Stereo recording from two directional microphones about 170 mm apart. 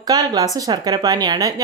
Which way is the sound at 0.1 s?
25° right (ahead or behind).